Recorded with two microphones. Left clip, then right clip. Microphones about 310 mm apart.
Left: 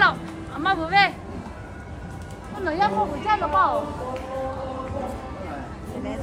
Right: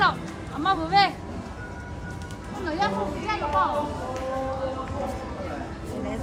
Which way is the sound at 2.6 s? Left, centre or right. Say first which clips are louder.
Left 4 dB; centre.